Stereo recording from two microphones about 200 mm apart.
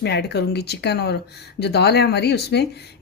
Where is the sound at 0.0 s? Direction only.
55° left (ahead or behind).